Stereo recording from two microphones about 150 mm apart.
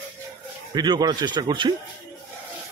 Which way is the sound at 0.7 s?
30° right (ahead or behind).